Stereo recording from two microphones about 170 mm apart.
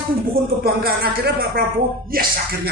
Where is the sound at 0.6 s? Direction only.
65° right (ahead or behind).